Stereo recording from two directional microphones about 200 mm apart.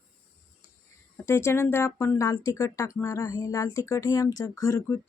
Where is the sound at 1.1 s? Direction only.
15° left (ahead or behind).